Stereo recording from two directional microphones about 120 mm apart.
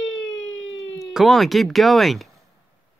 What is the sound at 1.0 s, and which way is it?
Speech, centre (ahead or behind).